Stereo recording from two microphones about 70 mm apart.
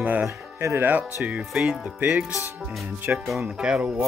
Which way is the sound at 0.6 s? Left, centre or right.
Right.